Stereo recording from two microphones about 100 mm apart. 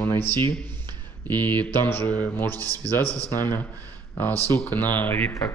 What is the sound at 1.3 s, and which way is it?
Speech, 20° left (ahead or behind).